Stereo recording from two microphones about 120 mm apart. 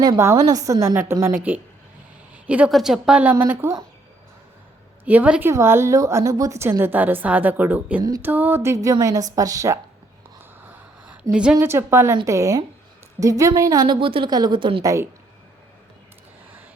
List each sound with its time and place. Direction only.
0.2 s a woman's voice: 25° right (ahead or behind)
2.3 s a sound: 10° right (ahead or behind)
2.7 s a woman's voice: 5° right (ahead or behind)
5.0 s a woman's voice: 10° right (ahead or behind)
10.3 s a sound: 15° right (ahead or behind)
11.6 s a woman's voice: 20° right (ahead or behind); by 14.8 s 45° right (ahead or behind)
14.8 s a woman's voice: 25° right (ahead or behind)